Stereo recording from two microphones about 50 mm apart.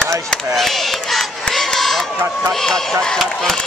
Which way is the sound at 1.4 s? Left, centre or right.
Centre.